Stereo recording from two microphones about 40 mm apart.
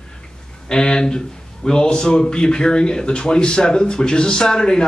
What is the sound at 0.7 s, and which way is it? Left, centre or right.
A man's voice, left.